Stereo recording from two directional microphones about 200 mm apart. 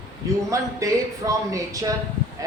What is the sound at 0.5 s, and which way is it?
Speech, 15° right (ahead or behind).